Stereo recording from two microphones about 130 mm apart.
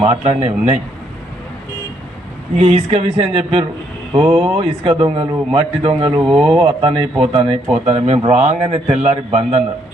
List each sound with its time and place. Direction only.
0.0 s speech: 60° right (ahead or behind)
2.6 s speech: 55° right (ahead or behind)